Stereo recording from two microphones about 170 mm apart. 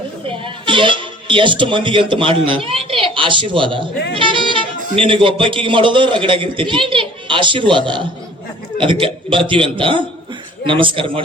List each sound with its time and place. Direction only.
0.4 s speech: 30° right (ahead or behind)